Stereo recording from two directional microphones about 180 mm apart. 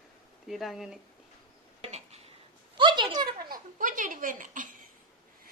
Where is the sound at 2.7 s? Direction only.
25° right (ahead or behind).